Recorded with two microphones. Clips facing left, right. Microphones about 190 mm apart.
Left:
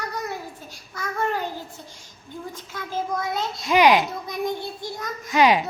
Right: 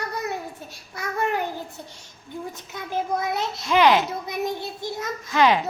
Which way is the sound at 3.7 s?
15° left (ahead or behind).